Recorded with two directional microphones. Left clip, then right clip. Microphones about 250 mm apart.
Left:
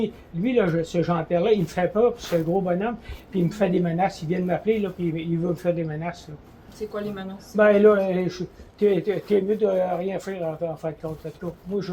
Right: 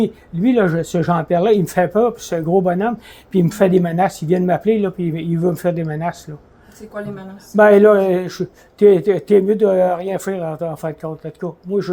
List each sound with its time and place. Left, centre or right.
0.0 s speech: right
7.5 s speech: right